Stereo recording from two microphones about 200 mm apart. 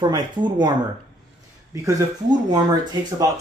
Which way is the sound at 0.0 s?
20° right (ahead or behind).